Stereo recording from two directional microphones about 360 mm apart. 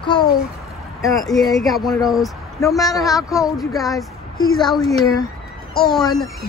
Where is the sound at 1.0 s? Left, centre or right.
Centre.